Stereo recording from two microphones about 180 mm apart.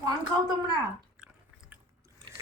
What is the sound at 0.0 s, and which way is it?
Speech, 25° right (ahead or behind).